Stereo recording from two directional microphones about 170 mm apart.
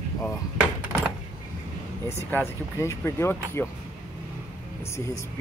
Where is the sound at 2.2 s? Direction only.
15° left (ahead or behind).